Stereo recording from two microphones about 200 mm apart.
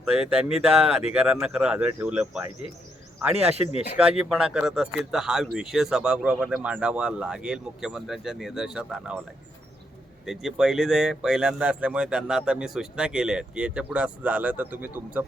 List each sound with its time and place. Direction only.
0.0 s speech: centre (ahead or behind)
3.7 s speech: 30° left (ahead or behind)
4.2 s speech: centre (ahead or behind)
10.2 s speech: centre (ahead or behind)